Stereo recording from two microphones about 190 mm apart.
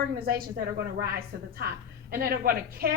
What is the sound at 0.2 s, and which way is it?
Speech, 50° right (ahead or behind).